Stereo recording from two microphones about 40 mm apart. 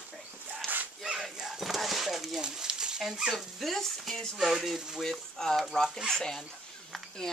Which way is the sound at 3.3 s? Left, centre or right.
Centre.